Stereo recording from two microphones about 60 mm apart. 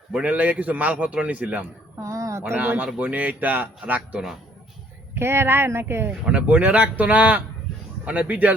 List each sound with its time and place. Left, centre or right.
0.1 s speech: right
2.0 s a sound: right
2.6 s speech: right
5.1 s speech: right
6.2 s speech: right